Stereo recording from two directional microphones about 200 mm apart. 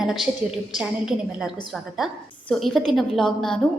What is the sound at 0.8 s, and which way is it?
A woman's voice, centre (ahead or behind).